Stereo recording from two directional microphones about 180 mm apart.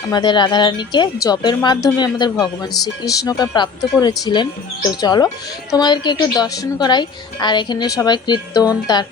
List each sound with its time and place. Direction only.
0.1 s a woman's voice: 25° left (ahead or behind)